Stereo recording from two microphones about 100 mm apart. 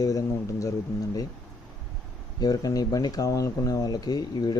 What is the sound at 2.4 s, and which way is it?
Speech, 40° left (ahead or behind).